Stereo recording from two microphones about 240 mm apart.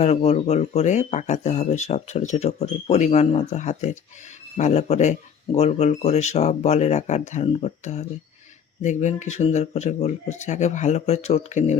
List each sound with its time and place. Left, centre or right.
0.0 s speech: left